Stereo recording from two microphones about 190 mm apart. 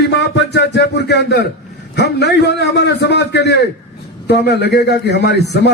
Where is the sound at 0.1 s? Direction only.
60° left (ahead or behind).